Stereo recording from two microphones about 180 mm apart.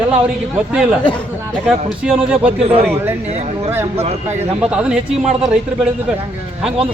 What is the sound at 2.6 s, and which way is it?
Speech, 35° right (ahead or behind).